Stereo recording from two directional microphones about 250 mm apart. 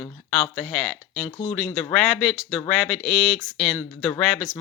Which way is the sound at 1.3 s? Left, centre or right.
Left.